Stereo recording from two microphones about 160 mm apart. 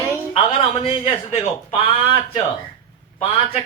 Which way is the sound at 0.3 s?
35° left (ahead or behind).